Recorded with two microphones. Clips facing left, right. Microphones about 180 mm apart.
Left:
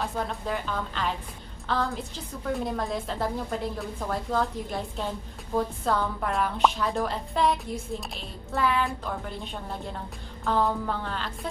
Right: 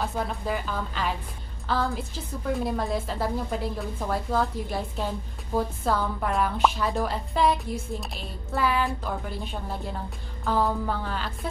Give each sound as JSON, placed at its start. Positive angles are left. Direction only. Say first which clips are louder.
{"t": 0.0, "sound": "a woman's voice", "louder": "right 1 dB", "side_deg": -5}